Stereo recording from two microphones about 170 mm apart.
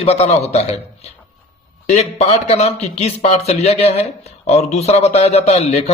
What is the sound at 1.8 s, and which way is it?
A man's voice, 40° left (ahead or behind).